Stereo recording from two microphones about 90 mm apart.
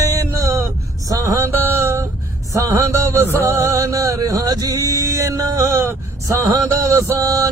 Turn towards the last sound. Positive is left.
turn(degrees=-40)  # may be behind; listen again after turning